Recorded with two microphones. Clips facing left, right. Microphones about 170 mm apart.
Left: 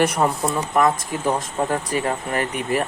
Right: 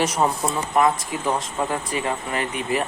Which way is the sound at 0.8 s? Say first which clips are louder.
Even; 45° left (ahead or behind).